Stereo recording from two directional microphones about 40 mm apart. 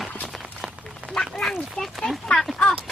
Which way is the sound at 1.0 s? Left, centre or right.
Centre.